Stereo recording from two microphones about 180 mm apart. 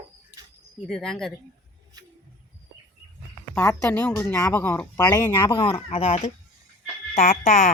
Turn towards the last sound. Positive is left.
turn(degrees=50)  # may be behind; listen again after turning